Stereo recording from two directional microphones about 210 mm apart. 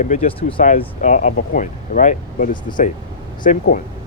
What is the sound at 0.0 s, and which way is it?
Speech, 40° left (ahead or behind).